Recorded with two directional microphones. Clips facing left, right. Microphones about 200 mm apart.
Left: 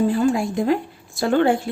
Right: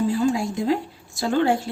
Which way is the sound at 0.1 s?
55° left (ahead or behind).